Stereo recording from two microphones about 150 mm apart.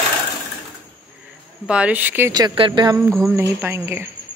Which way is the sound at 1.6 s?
10° right (ahead or behind).